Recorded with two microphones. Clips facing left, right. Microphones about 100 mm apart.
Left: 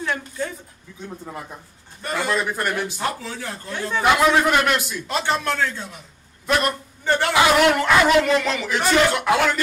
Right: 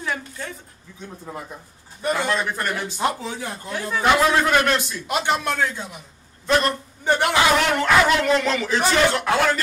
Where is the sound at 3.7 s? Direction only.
5° right (ahead or behind).